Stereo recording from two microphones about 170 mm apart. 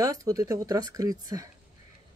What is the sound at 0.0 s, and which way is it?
Speech, 20° right (ahead or behind).